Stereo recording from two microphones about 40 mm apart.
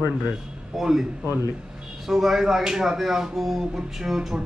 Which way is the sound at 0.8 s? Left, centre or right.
Centre.